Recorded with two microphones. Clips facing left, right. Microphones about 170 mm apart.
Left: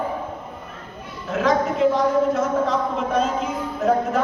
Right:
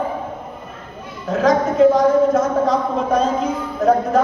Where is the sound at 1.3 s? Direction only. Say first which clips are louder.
Right 4 dB; 40° right (ahead or behind).